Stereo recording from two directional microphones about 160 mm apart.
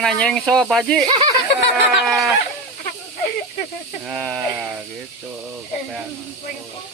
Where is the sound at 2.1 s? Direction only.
Centre (ahead or behind).